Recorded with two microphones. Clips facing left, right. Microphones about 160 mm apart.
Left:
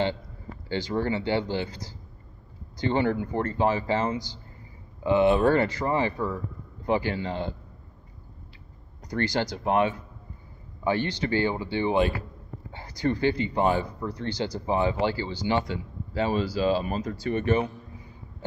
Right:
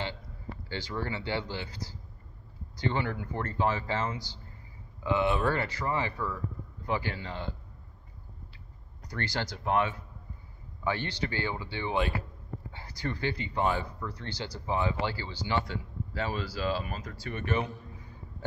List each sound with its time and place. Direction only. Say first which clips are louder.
0.7 s speech: left 8 dB; 20° left (ahead or behind)
9.1 s speech: left 8 dB; 15° left (ahead or behind)
11.0 s speech: left 8 dB; 20° left (ahead or behind)